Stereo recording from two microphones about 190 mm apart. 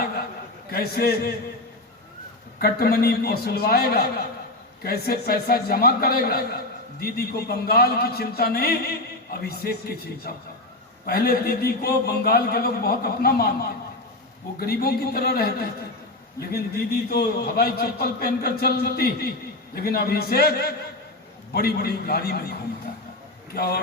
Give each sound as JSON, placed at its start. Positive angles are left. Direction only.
{"t": 0.7, "sound": "a man's voice", "side_deg": 55}
{"t": 2.6, "sound": "a man's voice", "side_deg": 55}
{"t": 14.6, "sound": "a man's voice", "side_deg": 55}
{"t": 23.6, "sound": "a man's voice", "side_deg": 55}